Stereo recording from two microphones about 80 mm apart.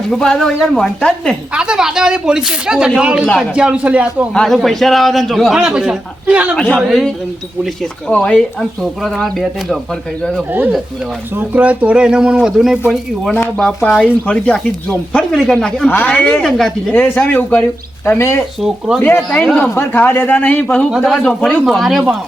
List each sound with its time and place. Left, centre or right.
0.1 s speech: centre
1.5 s speech: centre
4.4 s speech: centre
6.6 s speech: centre
8.1 s speech: centre
8.8 s speech: centre
11.3 s speech: centre
13.9 s speech: centre
15.9 s speech: centre
16.9 s speech: left
18.0 s speech: left
19.0 s speech: centre